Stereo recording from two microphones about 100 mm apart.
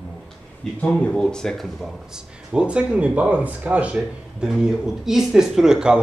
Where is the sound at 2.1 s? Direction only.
10° right (ahead or behind).